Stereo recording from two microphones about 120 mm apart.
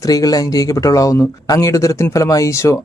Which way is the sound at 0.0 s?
30° left (ahead or behind).